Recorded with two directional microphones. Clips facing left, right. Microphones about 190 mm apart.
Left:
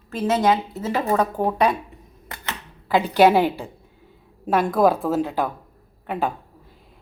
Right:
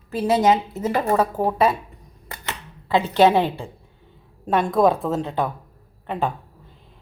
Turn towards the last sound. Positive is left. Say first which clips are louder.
# even
turn(degrees=0)  # may be behind; listen again after turning